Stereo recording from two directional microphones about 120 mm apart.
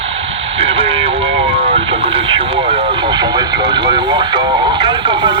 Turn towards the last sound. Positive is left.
turn(degrees=-40)  # may be behind; listen again after turning